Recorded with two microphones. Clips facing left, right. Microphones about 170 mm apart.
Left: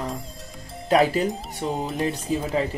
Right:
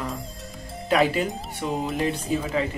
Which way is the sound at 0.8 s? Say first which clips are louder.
Left 2 dB; 40° left (ahead or behind).